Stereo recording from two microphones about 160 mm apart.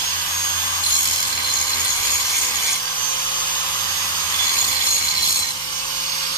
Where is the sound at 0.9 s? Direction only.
30° left (ahead or behind).